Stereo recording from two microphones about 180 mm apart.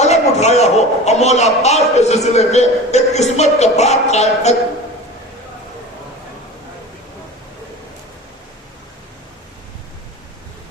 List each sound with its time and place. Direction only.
0.0 s a man's voice: 40° left (ahead or behind)